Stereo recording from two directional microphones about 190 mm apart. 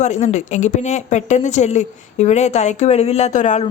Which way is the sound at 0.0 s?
35° left (ahead or behind).